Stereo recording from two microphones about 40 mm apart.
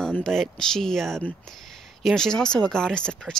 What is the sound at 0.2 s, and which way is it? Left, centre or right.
Speech, centre.